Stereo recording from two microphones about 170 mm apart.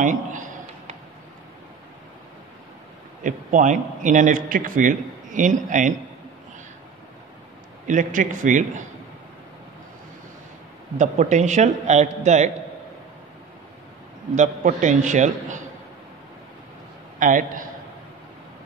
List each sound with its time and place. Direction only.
0.0 s a sound: 50° right (ahead or behind)
3.3 s a man's voice: 50° right (ahead or behind)
7.8 s a man's voice: 50° right (ahead or behind)
11.0 s a man's voice: 45° right (ahead or behind)
14.3 s a man's voice: 45° right (ahead or behind)
17.2 s a man's voice: 50° right (ahead or behind)